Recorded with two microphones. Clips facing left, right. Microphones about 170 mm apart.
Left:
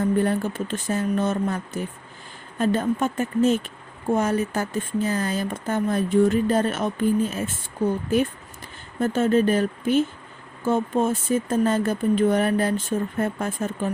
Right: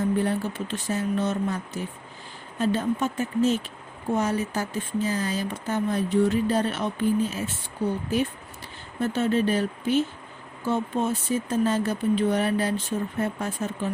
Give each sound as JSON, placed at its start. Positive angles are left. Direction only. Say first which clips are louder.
{"t": 0.2, "sound": "speech", "louder": "left 3 dB", "side_deg": 50}
{"t": 9.0, "sound": "speech", "louder": "left 4 dB", "side_deg": 50}